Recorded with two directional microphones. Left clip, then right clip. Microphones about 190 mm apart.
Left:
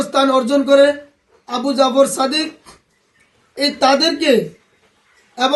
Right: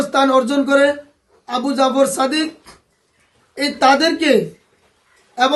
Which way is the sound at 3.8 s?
Centre (ahead or behind).